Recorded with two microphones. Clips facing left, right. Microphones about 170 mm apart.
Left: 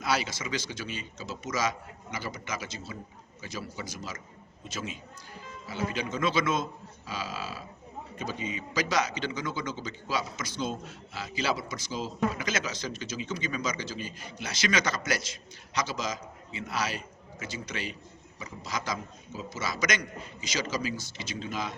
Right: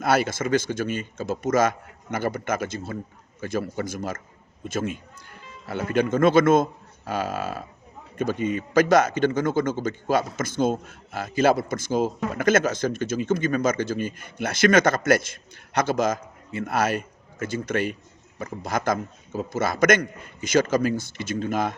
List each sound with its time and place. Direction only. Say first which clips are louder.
0.0 s a man's voice: right 8 dB; 50° right (ahead or behind)